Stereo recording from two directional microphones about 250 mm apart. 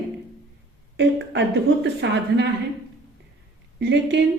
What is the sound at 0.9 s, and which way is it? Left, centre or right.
A woman's voice, right.